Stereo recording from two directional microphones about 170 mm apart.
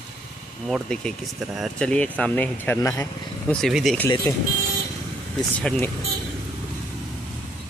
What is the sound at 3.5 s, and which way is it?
Speech, centre (ahead or behind).